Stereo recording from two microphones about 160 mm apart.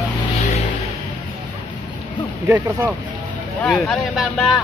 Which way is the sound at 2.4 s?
10° right (ahead or behind).